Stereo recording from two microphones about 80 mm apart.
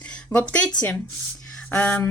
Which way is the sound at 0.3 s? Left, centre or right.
Centre.